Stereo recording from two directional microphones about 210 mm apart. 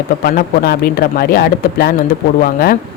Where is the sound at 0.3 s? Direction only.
50° left (ahead or behind).